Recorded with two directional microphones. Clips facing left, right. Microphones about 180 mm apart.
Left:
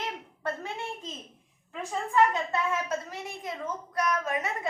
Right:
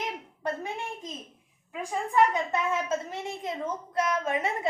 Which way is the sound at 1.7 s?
10° right (ahead or behind).